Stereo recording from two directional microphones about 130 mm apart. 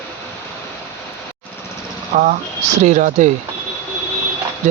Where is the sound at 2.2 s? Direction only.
80° right.